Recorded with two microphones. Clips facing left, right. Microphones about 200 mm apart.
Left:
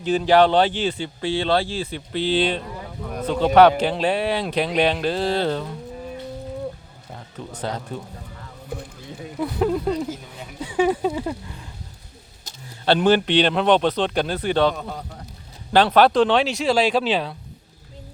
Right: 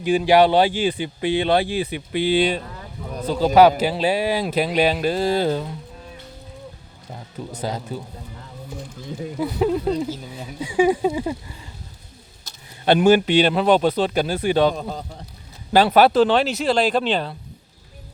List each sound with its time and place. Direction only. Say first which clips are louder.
0.0 s speech: right 1 dB; 10° right (ahead or behind)
7.5 s speech: right 1 dB; 10° right (ahead or behind)
8.7 s speech: left 3 dB; 60° left (ahead or behind)
9.4 s speech: right 1 dB; 5° right (ahead or behind)
12.8 s speech: right 3 dB; 10° right (ahead or behind)
14.8 s a man's voice: right 3 dB; 30° right (ahead or behind)
15.7 s speech: right 1 dB; 10° right (ahead or behind)